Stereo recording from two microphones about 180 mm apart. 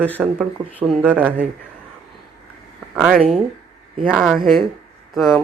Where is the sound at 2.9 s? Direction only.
5° right (ahead or behind).